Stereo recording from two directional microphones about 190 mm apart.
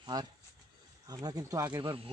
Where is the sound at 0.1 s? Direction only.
20° right (ahead or behind).